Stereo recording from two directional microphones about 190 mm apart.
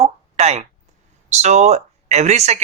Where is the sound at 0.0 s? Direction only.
35° right (ahead or behind).